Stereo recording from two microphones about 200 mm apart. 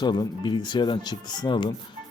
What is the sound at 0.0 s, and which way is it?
A man's voice, 20° left (ahead or behind).